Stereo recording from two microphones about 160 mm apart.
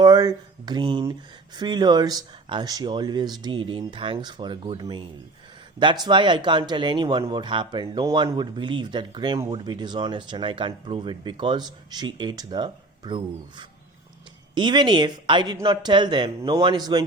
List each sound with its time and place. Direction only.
0.0 s speech: 25° right (ahead or behind)